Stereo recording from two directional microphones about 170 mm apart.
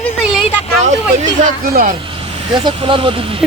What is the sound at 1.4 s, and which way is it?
Speech, 55° right (ahead or behind).